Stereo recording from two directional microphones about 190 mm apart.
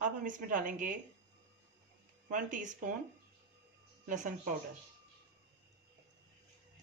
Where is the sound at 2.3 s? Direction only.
45° right (ahead or behind).